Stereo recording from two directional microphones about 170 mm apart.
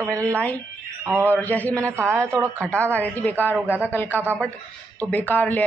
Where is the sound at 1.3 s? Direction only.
10° left (ahead or behind).